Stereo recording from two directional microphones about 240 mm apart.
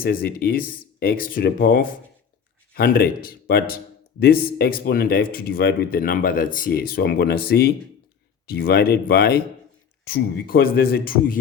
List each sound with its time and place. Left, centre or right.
0.0 s speech: left